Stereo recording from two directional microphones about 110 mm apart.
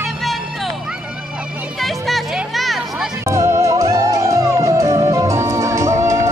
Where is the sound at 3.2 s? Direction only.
25° right (ahead or behind).